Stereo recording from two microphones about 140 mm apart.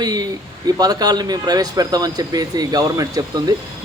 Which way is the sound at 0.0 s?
30° right (ahead or behind).